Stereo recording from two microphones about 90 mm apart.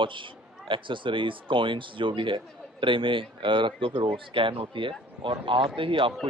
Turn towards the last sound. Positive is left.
turn(degrees=-70)  # may be behind; listen again after turning